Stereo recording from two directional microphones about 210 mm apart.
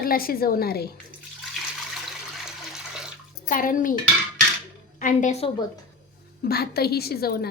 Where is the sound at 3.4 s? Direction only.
40° left (ahead or behind).